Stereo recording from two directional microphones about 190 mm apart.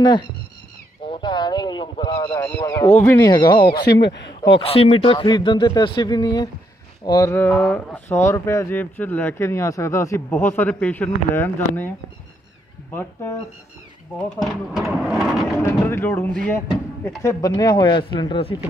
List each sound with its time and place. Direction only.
0.0 s speech: 20° left (ahead or behind)
3.3 s speech: 25° left (ahead or behind)
3.9 s speech: 65° left (ahead or behind)
4.4 s speech: 30° left (ahead or behind); by 11.9 s 10° left (ahead or behind)
12.9 s speech: 15° left (ahead or behind)
14.1 s speech: centre (ahead or behind)
15.6 s speech: 15° left (ahead or behind)